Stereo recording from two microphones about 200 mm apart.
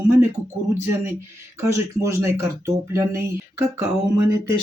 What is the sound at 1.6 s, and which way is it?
Speech, 15° right (ahead or behind).